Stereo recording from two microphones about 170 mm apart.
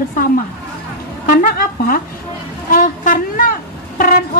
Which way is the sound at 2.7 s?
55° left (ahead or behind).